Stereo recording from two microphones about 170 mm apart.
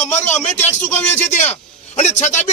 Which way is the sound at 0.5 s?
40° left (ahead or behind).